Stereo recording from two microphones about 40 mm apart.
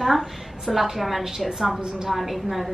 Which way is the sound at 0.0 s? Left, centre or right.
Centre.